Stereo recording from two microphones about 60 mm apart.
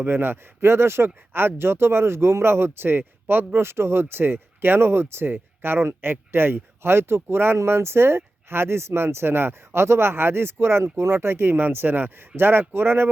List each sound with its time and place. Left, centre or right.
0.0 s speech: right